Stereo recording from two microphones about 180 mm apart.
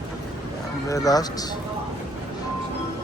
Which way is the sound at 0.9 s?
20° left (ahead or behind).